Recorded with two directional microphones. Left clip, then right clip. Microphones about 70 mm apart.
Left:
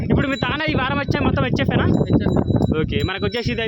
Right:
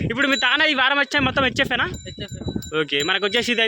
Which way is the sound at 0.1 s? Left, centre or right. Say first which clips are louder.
Right 3 dB; centre.